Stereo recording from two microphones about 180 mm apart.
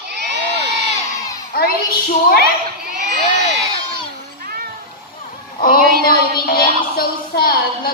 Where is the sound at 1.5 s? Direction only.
55° left (ahead or behind).